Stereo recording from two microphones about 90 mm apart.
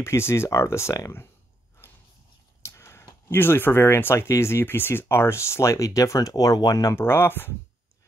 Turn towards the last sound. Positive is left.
turn(degrees=25)  # may be behind; listen again after turning